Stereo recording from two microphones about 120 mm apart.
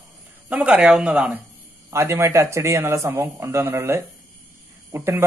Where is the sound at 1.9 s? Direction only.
20° right (ahead or behind).